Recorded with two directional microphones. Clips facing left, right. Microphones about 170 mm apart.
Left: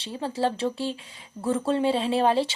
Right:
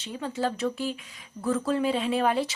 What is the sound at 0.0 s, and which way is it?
Speech, 30° left (ahead or behind).